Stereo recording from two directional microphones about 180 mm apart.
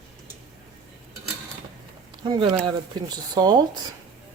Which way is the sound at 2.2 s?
25° right (ahead or behind).